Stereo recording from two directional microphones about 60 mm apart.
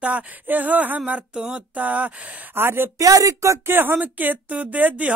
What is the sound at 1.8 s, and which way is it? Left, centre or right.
Speech, right.